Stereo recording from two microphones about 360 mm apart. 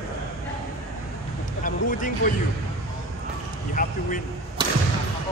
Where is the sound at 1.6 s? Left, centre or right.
Left.